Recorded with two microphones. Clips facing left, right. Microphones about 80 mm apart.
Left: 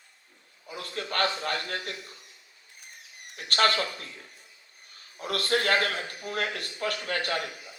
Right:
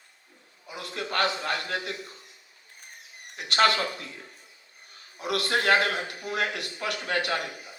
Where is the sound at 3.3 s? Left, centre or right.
Right.